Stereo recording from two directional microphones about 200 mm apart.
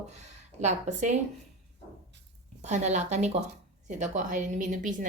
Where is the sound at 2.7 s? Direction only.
35° right (ahead or behind).